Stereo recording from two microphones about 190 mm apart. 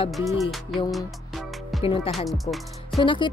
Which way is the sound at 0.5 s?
Centre (ahead or behind).